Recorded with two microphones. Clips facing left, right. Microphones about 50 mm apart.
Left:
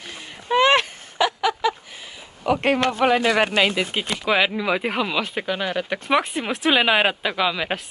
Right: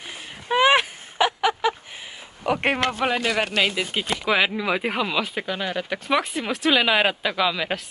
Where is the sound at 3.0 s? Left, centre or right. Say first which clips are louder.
Left 8 dB; centre.